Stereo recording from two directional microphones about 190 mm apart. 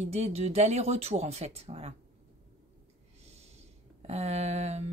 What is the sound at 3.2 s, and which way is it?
Snort, 35° right (ahead or behind).